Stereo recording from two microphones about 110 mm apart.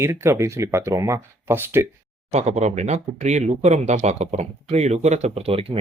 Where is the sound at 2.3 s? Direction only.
85° right.